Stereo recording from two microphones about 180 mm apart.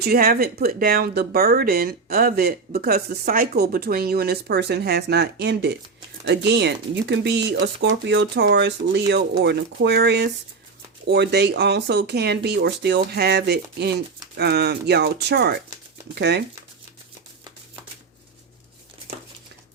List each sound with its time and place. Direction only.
0.0 s speech: 55° right (ahead or behind)